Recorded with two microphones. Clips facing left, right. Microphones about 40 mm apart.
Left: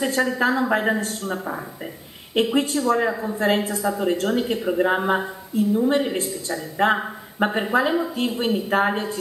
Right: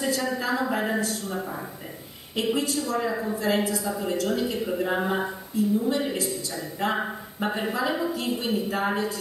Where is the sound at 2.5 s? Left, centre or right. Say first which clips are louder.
Left 6 dB; left.